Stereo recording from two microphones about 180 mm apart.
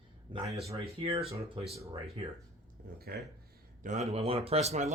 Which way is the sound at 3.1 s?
60° right (ahead or behind).